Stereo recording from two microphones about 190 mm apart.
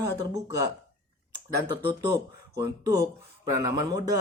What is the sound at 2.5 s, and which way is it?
Speech, 20° right (ahead or behind).